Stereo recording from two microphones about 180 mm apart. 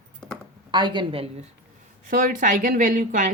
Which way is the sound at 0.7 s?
25° right (ahead or behind).